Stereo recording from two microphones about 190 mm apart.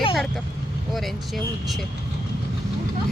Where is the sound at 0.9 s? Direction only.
Centre (ahead or behind).